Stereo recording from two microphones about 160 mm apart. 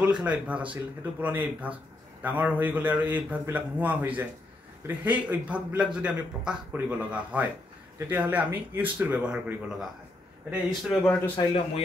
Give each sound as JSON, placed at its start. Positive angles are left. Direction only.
{"t": 0.0, "sound": "speech", "side_deg": -5}
{"t": 11.3, "sound": "a man's voice", "side_deg": 35}